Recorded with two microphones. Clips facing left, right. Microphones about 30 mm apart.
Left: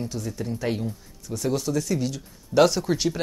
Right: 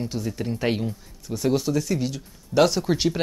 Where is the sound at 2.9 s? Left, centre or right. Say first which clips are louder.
Right 2 dB; centre.